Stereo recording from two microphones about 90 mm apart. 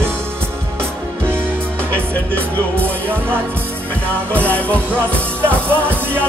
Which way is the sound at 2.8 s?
25° right (ahead or behind).